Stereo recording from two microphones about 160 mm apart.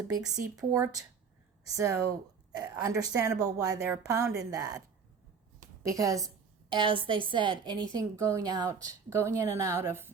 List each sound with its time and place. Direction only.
0.2 s speech: 5° right (ahead or behind)
0.6 s a woman's voice: 20° right (ahead or behind)
5.8 s a woman's voice: 20° right (ahead or behind)